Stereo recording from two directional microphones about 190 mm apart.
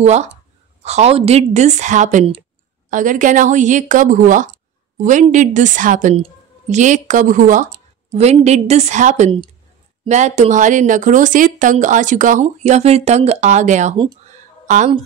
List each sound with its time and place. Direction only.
0.0 s a woman's voice: 35° right (ahead or behind)